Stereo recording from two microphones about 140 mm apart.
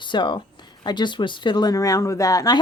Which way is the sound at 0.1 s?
35° left (ahead or behind).